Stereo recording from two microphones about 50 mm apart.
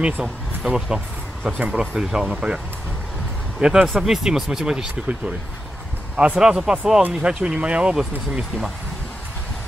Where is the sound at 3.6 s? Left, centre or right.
Centre.